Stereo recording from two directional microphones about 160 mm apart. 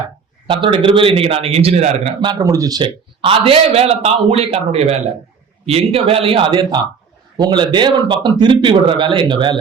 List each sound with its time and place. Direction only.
0.4 s a man's voice: 30° right (ahead or behind)